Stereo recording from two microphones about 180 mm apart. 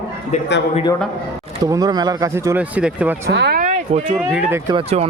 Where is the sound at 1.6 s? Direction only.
20° right (ahead or behind).